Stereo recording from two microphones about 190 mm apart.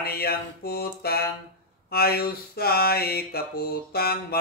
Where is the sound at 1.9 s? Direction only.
55° left (ahead or behind).